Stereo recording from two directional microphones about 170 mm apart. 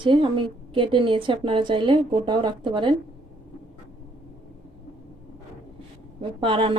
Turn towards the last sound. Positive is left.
turn(degrees=-30)  # may be behind; listen again after turning